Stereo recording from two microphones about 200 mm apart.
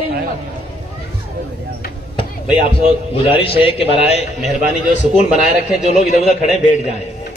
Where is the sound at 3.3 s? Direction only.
30° left (ahead or behind).